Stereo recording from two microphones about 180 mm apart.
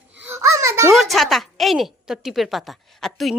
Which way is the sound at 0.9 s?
Centre (ahead or behind).